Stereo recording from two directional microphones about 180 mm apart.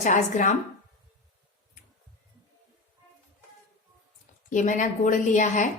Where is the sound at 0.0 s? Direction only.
45° left (ahead or behind).